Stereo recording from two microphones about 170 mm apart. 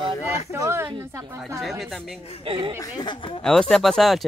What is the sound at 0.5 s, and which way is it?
A woman's voice, 15° right (ahead or behind).